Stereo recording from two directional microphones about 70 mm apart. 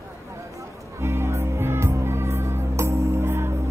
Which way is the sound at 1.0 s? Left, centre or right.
Right.